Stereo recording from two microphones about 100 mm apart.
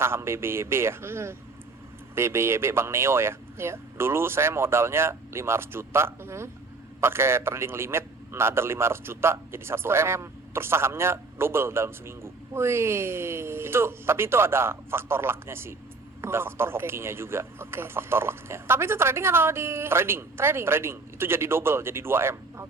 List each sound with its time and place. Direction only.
0.0 s a man's voice: 25° right (ahead or behind)